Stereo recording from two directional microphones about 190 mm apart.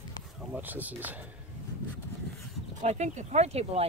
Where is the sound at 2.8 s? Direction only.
40° right (ahead or behind).